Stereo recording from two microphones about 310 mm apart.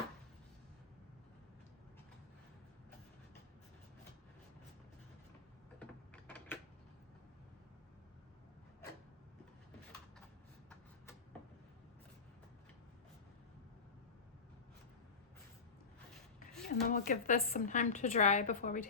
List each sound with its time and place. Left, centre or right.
5.8 s mechanisms: centre
16.5 s a sound: centre
16.9 s a woman's voice: left